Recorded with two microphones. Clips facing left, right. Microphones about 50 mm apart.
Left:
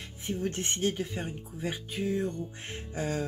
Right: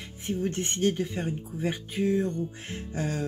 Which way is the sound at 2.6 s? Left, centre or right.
Left.